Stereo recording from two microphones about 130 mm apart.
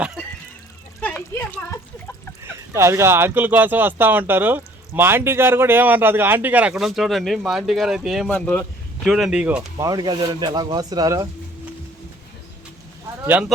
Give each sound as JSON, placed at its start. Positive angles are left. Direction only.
{"t": 1.0, "sound": "speech", "side_deg": 15}
{"t": 2.4, "sound": "speech", "side_deg": -20}
{"t": 8.3, "sound": "speech", "side_deg": 10}
{"t": 9.0, "sound": "speech", "side_deg": 0}
{"t": 9.7, "sound": "speech", "side_deg": -30}
{"t": 13.2, "sound": "speech", "side_deg": -15}